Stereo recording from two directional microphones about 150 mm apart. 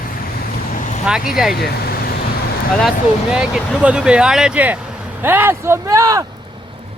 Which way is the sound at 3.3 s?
5° right (ahead or behind).